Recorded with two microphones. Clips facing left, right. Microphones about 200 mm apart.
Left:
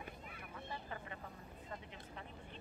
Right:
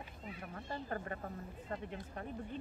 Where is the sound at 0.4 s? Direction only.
50° right (ahead or behind).